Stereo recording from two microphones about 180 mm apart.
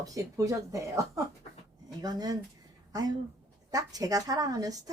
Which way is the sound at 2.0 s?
20° right (ahead or behind).